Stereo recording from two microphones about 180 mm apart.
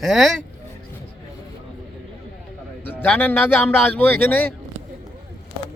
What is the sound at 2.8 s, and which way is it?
Speech, 10° left (ahead or behind).